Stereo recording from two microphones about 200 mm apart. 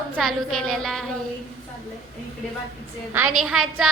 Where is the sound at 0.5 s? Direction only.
Centre (ahead or behind).